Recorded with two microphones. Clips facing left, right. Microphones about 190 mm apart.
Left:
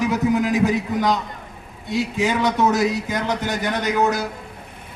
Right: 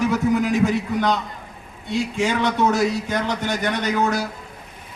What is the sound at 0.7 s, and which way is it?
Speech, 20° left (ahead or behind).